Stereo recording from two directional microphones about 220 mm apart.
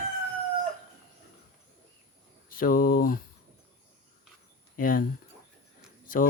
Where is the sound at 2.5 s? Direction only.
40° left (ahead or behind).